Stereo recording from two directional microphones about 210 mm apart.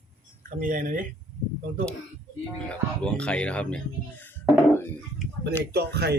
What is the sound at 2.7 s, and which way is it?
Speech, 5° left (ahead or behind).